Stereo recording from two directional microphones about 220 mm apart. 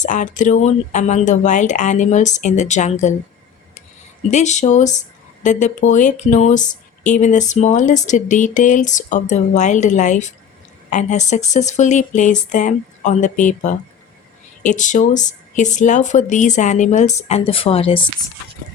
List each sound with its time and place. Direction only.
0.0 s speech: 35° left (ahead or behind)
4.3 s speech: 30° left (ahead or behind)